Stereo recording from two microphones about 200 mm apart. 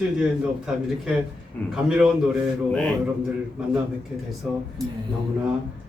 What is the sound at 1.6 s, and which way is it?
Speech, 10° left (ahead or behind).